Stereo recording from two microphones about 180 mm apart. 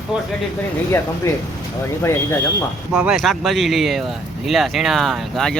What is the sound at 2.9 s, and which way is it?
Speech, 5° right (ahead or behind).